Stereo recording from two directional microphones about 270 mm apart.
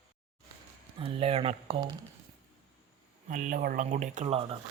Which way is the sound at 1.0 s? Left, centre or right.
Right.